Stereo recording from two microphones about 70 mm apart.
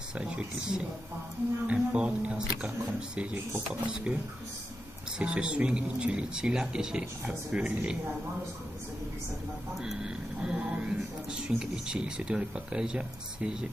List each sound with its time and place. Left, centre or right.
0.1 s speech: centre
5.2 s speech: centre
9.8 s speech: centre